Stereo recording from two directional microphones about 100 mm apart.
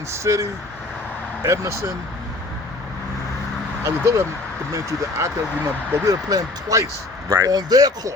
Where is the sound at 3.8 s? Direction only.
30° right (ahead or behind).